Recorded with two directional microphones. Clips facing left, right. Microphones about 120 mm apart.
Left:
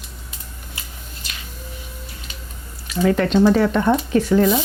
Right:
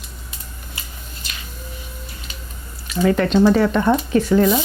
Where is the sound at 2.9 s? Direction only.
20° right (ahead or behind).